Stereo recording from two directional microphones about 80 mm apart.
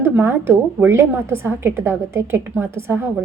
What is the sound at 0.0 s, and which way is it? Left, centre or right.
A woman's voice, right.